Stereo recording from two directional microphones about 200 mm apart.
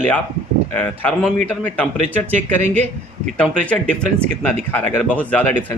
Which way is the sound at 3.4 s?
5° left (ahead or behind).